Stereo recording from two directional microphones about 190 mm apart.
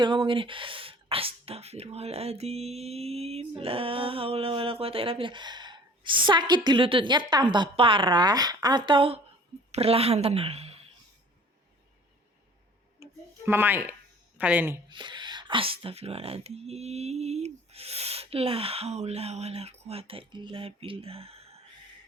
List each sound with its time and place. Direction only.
0.0 s a woman's voice: 25° right (ahead or behind)
13.0 s a sound: 10° right (ahead or behind)
14.3 s speech: 10° right (ahead or behind)
14.8 s speech: 25° right (ahead or behind)